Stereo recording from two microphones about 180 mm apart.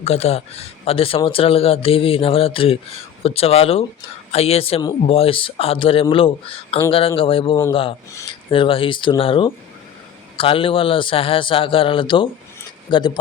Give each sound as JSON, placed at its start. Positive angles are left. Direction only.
{"t": 0.0, "sound": "a man's voice", "side_deg": 35}